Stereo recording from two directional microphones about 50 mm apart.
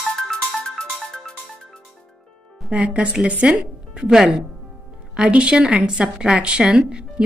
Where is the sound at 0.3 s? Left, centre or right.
Centre.